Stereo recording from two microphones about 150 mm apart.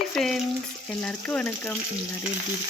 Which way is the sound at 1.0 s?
10° left (ahead or behind).